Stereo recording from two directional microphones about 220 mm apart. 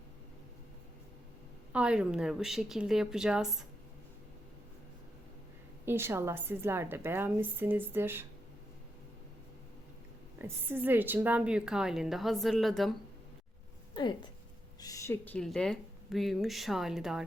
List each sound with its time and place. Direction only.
1.7 s a woman's voice: 5° right (ahead or behind)
5.8 s a woman's voice: 10° right (ahead or behind)
10.3 s a woman's voice: 10° right (ahead or behind)
13.9 s a woman's voice: 20° left (ahead or behind); by 17.2 s centre (ahead or behind)